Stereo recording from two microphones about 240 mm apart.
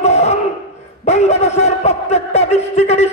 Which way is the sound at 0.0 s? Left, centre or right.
Left.